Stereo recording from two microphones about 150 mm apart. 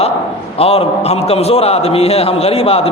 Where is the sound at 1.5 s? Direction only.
40° left (ahead or behind).